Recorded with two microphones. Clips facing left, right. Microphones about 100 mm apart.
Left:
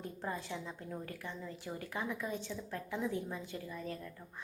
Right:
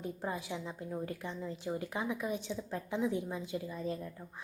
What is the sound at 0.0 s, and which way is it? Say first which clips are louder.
A woman's voice: right 3 dB; 15° right (ahead or behind).